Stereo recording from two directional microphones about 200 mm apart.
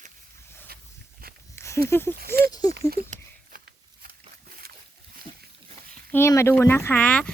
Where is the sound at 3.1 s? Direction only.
45° right (ahead or behind).